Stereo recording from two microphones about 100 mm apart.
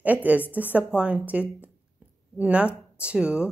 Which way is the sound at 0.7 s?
15° right (ahead or behind).